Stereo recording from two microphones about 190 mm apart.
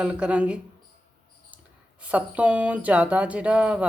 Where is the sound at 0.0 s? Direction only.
5° right (ahead or behind).